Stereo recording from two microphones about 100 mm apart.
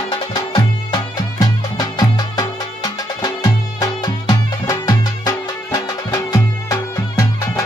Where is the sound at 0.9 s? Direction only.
40° left (ahead or behind).